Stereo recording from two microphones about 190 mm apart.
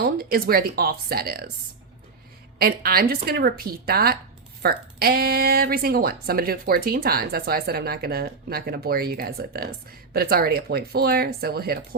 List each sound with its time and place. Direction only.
0.0 s speech: 55° right (ahead or behind)
2.6 s speech: 55° right (ahead or behind)